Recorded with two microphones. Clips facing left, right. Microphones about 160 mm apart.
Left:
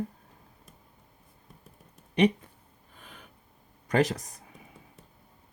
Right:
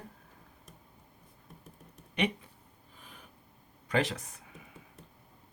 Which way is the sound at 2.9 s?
65° left (ahead or behind).